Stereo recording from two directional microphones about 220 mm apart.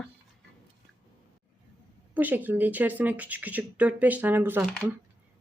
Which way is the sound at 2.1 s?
5° right (ahead or behind).